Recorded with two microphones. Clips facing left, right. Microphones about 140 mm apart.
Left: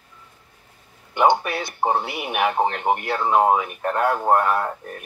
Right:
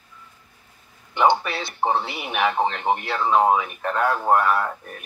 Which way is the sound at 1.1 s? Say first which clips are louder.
Left 1 dB; 15° left (ahead or behind).